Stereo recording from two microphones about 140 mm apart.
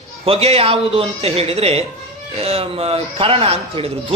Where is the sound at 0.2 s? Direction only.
45° right (ahead or behind).